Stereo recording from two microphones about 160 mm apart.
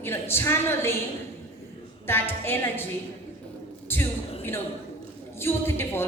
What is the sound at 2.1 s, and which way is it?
Speech, 15° left (ahead or behind).